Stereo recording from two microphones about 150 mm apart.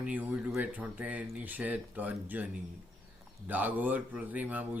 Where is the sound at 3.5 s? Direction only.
10° right (ahead or behind).